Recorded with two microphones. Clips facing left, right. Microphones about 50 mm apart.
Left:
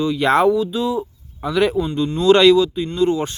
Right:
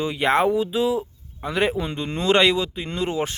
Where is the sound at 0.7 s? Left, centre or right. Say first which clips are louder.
Even; right.